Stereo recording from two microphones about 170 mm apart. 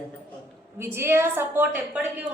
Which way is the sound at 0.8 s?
15° right (ahead or behind).